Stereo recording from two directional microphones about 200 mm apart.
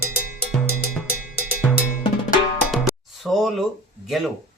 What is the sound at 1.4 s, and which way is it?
Percussion, 50° left (ahead or behind).